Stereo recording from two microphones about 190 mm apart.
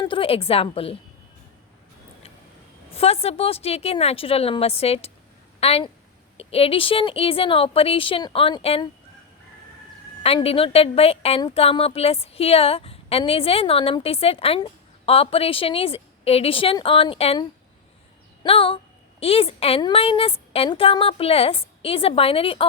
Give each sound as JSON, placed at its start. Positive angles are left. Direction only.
{"t": 0.0, "sound": "speech", "side_deg": 30}
{"t": 2.9, "sound": "a woman's voice", "side_deg": 30}
{"t": 10.2, "sound": "a woman's voice", "side_deg": 30}
{"t": 18.4, "sound": "a woman's voice", "side_deg": 30}